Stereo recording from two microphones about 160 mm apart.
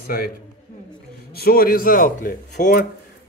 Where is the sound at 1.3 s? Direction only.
70° left (ahead or behind).